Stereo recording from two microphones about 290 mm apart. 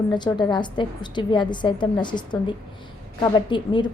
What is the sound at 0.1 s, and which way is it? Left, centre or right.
A woman's voice, centre.